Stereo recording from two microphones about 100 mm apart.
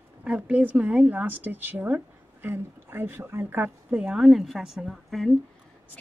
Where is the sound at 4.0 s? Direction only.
5° right (ahead or behind).